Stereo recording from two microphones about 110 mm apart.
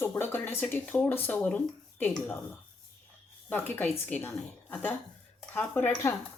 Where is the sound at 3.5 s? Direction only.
20° left (ahead or behind).